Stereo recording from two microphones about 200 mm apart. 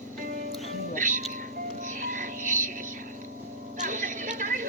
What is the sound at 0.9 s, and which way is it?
Music, 40° right (ahead or behind).